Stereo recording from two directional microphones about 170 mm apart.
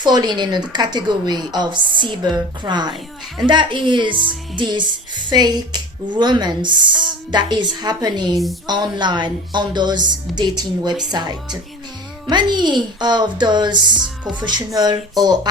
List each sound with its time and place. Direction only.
0.0 s a woman's voice: 25° right (ahead or behind)
11.1 s a woman's voice: 25° right (ahead or behind)
14.0 s a woman's voice: 5° right (ahead or behind)
14.4 s a woman's voice: 25° right (ahead or behind)